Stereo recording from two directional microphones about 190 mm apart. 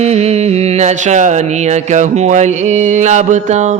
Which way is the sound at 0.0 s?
35° right (ahead or behind).